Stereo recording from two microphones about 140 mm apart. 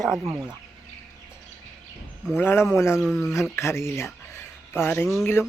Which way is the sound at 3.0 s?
5° left (ahead or behind).